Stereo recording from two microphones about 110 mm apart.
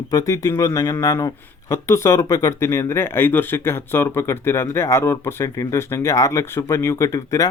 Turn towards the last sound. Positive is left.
turn(degrees=30)  # may be behind; listen again after turning